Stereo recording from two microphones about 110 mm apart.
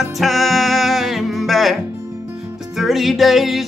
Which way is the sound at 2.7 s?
Centre (ahead or behind).